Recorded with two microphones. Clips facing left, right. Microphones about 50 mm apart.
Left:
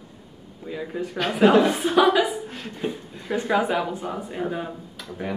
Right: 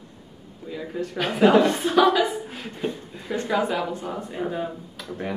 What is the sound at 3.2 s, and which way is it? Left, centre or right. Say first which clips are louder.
Speech: left 2 dB; centre.